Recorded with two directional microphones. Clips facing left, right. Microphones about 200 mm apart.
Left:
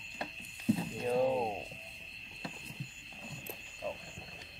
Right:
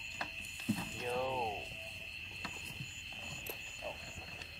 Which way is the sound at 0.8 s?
40° left (ahead or behind).